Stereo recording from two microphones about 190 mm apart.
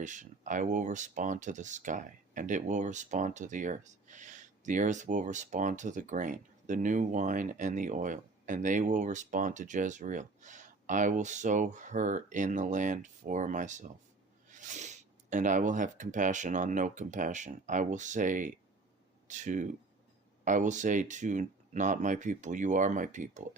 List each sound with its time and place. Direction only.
0.0 s speech: 40° right (ahead or behind)